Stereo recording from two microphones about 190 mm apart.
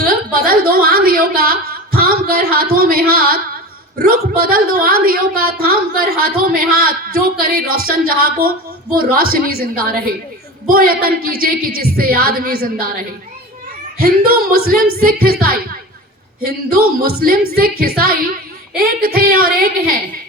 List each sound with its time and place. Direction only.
0.0 s a woman's voice: 50° right (ahead or behind)
14.0 s a woman's voice: 55° right (ahead or behind)